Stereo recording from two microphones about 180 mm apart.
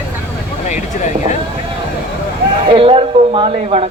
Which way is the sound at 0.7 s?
40° left (ahead or behind).